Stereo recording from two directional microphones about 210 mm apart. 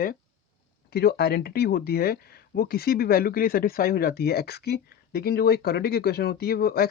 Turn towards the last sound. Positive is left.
turn(degrees=45)  # may be behind; listen again after turning